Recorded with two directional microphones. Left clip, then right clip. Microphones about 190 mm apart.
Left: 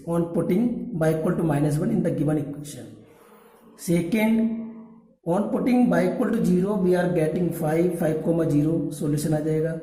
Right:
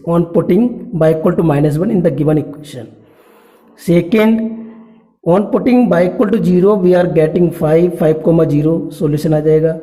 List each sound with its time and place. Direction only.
0.1 s a man's voice: 45° right (ahead or behind)
3.8 s a man's voice: 45° right (ahead or behind)